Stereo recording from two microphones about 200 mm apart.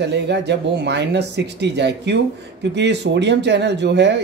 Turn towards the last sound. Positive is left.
turn(degrees=-60)  # may be behind; listen again after turning